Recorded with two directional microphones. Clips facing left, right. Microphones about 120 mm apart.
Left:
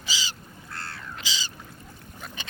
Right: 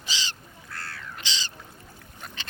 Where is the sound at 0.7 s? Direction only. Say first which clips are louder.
Left 1 dB; 25° left (ahead or behind).